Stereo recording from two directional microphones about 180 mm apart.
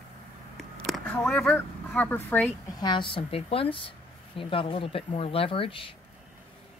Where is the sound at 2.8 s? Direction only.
25° left (ahead or behind).